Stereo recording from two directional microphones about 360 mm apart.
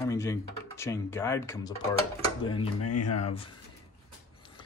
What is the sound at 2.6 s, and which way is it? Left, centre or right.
Speech, left.